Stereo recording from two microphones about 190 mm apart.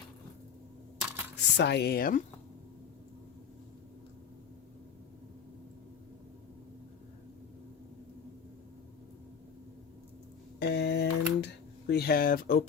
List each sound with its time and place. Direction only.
0.9 s coin: 10° right (ahead or behind)
1.5 s speech: 60° left (ahead or behind)
10.6 s a sound: 60° left (ahead or behind)
11.9 s speech: 55° left (ahead or behind)